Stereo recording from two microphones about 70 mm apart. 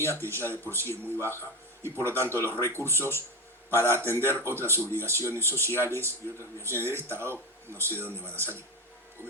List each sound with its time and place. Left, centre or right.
0.1 s speech: right